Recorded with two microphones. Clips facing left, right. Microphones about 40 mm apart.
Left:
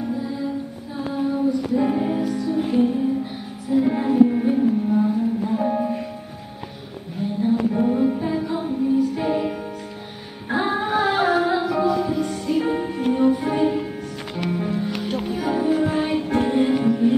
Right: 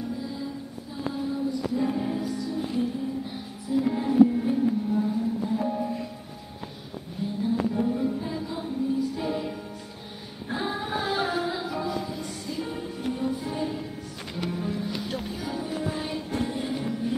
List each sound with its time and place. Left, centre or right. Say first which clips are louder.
0.1 s music: left 7 dB; left
3.8 s music: left 3 dB; left
7.4 s music: left 6 dB; left